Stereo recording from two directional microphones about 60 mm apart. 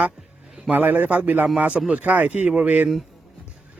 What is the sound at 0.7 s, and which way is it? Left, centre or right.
A man's voice, right.